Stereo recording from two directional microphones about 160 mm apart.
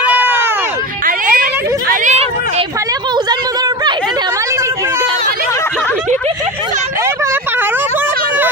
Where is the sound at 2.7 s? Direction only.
20° right (ahead or behind).